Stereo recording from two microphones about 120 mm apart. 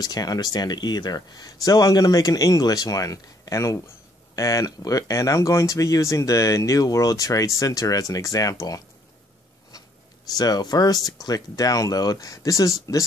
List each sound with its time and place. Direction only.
0.0 s speech: 30° left (ahead or behind)
10.3 s speech: 35° left (ahead or behind)